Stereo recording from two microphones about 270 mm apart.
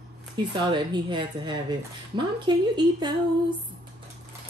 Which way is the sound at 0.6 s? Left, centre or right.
Centre.